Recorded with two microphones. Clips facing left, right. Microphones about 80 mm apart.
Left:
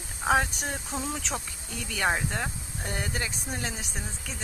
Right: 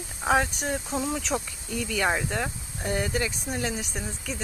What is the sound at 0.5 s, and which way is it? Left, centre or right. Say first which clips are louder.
Speech: right 4 dB; right.